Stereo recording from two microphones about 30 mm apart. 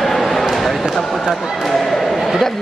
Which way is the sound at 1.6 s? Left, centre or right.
Centre.